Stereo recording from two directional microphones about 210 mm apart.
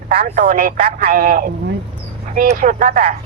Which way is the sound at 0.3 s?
40° right (ahead or behind).